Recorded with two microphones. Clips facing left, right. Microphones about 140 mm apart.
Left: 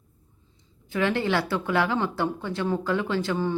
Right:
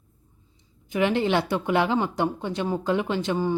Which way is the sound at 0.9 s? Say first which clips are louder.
Right 2 dB; 20° right (ahead or behind).